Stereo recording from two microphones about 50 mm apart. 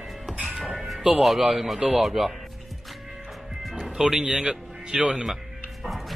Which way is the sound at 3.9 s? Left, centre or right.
Centre.